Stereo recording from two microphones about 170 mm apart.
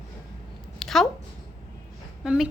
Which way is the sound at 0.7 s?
Centre (ahead or behind).